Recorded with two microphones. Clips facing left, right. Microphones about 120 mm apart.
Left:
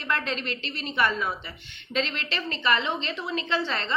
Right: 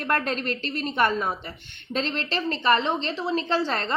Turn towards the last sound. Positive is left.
turn(degrees=-40)  # may be behind; listen again after turning